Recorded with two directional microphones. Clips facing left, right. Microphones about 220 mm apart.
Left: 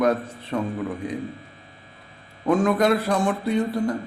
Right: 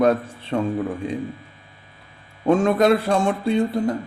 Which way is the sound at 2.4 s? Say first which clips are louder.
Right 3 dB; 25° right (ahead or behind).